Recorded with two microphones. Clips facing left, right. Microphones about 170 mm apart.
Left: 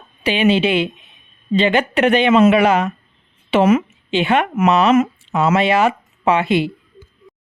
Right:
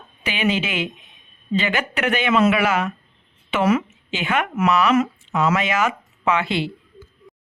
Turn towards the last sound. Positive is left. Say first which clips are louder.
# left 5 dB
turn(degrees=20)  # may be behind; listen again after turning